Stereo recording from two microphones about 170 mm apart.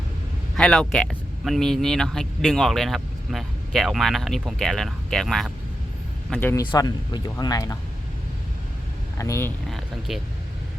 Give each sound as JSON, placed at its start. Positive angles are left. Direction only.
{"t": 0.5, "sound": "speech", "side_deg": 5}
{"t": 6.7, "sound": "speech", "side_deg": 25}
{"t": 9.1, "sound": "speech", "side_deg": 15}
{"t": 9.6, "sound": "speech", "side_deg": 0}